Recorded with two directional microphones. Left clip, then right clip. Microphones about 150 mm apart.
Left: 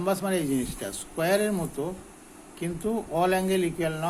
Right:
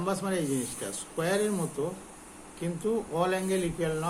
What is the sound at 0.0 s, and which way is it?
Speech, 50° left (ahead or behind).